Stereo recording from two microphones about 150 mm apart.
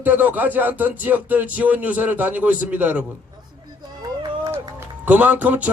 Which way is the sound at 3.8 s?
30° right (ahead or behind).